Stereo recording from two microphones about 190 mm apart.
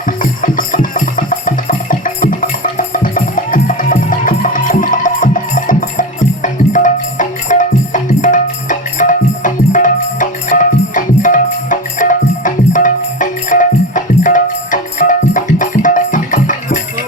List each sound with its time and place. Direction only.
0.2 s music: 45° left (ahead or behind)